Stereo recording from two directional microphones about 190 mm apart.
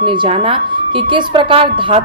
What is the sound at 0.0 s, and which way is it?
A woman's voice, 25° right (ahead or behind).